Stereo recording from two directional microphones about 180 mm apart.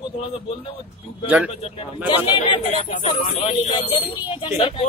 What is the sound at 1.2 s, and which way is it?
Speech, 5° right (ahead or behind).